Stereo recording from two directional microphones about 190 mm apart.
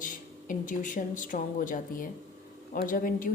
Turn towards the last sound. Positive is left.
turn(degrees=45)  # may be behind; listen again after turning